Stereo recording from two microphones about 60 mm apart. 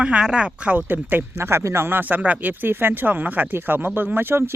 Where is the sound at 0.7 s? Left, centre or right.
Right.